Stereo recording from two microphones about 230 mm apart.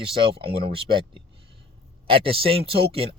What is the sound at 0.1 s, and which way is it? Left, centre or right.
Speech, right.